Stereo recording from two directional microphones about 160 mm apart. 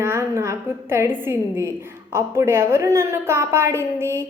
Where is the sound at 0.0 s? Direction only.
15° right (ahead or behind).